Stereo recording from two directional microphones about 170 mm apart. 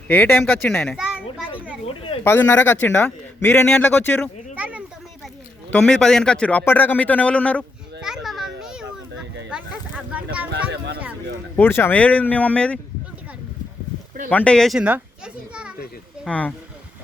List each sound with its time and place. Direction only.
0.1 s a man's voice: 10° left (ahead or behind)
2.2 s a man's voice: 10° left (ahead or behind)
4.5 s a sound: 10° right (ahead or behind)
5.7 s a man's voice: 5° left (ahead or behind)
8.0 s children playing: centre (ahead or behind)
9.5 s a sound: 5° right (ahead or behind)
10.5 s a sound: 75° right (ahead or behind)
11.5 s a man's voice: 10° left (ahead or behind)
14.3 s a child's voice: 5° left (ahead or behind)
16.2 s a man's voice: 5° left (ahead or behind)